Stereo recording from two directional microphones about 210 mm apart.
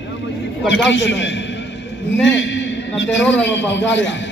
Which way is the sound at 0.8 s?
60° left (ahead or behind).